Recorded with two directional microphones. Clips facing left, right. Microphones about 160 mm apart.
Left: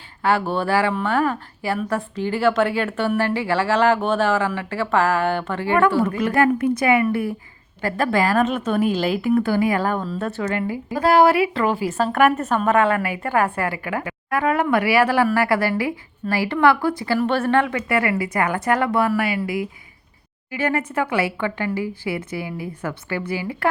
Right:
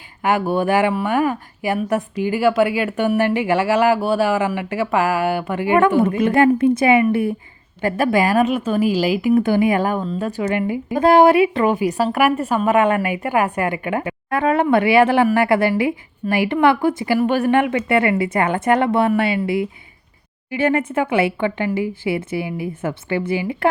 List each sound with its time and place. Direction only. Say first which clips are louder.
0.2 s speech: right 2 dB; 15° right (ahead or behind)
9.3 s speech: right 3 dB; 20° right (ahead or behind)